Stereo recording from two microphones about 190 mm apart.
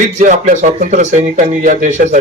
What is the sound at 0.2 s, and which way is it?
A man's voice, 40° right (ahead or behind).